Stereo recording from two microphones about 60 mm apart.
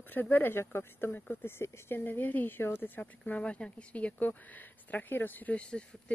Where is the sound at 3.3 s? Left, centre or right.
Left.